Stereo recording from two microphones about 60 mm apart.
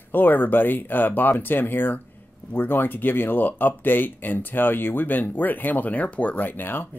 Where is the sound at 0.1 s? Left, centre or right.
Left.